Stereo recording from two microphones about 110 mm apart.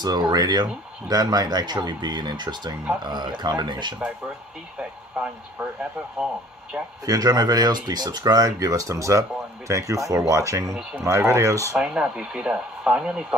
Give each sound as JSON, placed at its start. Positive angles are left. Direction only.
{"t": 0.0, "sound": "speech", "side_deg": -35}
{"t": 4.7, "sound": "speech", "side_deg": -10}
{"t": 7.1, "sound": "speech", "side_deg": -35}
{"t": 10.7, "sound": "speech", "side_deg": -5}
{"t": 11.1, "sound": "speech", "side_deg": -25}
{"t": 11.7, "sound": "speech", "side_deg": -5}